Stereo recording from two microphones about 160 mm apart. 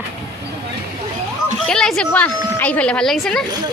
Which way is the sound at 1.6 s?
5° left (ahead or behind).